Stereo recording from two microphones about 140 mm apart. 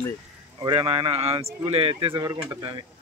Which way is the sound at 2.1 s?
25° right (ahead or behind).